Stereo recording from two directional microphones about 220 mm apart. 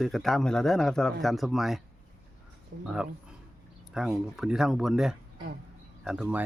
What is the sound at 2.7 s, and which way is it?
Speech, 50° right (ahead or behind).